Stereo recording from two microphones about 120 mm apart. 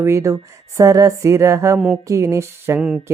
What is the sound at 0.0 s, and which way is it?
Speech, 25° right (ahead or behind).